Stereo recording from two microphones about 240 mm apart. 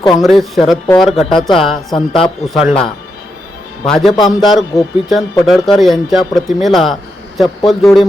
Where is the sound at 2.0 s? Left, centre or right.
Centre.